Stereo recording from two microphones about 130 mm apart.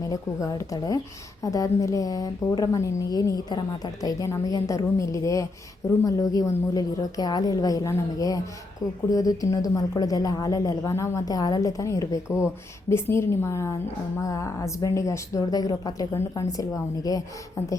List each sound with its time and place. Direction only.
0.1 s a woman's voice: 25° left (ahead or behind)